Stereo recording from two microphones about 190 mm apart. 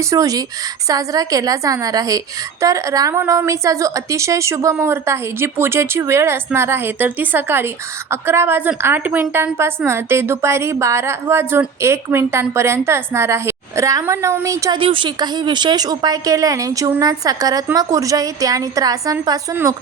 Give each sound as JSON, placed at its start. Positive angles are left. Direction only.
{"t": 0.0, "sound": "a woman's voice", "side_deg": -15}
{"t": 14.8, "sound": "a woman's voice", "side_deg": -25}